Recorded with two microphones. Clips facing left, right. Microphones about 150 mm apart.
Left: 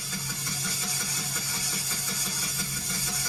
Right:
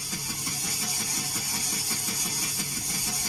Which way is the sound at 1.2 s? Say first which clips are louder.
Right 1 dB; 15° right (ahead or behind).